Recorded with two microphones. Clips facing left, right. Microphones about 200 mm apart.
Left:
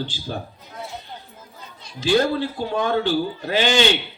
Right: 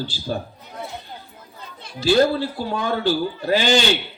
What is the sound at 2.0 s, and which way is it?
A man's voice, 40° right (ahead or behind).